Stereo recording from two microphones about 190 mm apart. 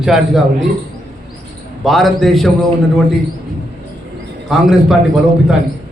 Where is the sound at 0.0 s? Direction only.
Centre (ahead or behind).